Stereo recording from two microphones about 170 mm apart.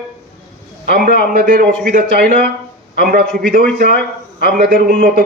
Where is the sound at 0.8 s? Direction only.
60° right (ahead or behind).